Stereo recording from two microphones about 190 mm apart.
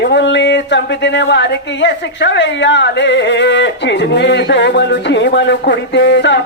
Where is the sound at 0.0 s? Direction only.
65° left (ahead or behind).